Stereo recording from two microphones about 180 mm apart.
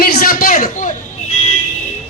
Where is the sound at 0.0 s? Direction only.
55° left (ahead or behind).